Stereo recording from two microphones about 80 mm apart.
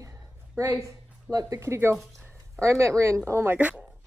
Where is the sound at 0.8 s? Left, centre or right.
Right.